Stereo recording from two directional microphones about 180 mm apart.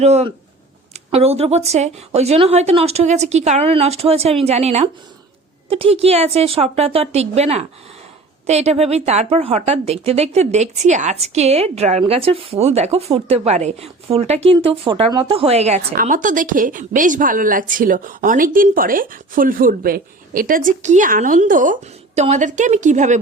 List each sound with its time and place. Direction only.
0.0 s a woman's voice: 35° right (ahead or behind)